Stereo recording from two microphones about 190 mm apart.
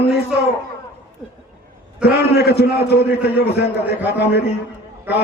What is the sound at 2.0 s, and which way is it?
A man's voice, 55° left (ahead or behind).